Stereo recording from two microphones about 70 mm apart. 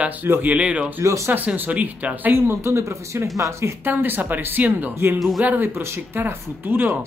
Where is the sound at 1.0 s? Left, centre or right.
Right.